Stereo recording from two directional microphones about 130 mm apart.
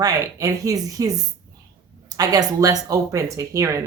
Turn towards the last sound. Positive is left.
turn(degrees=-25)  # may be behind; listen again after turning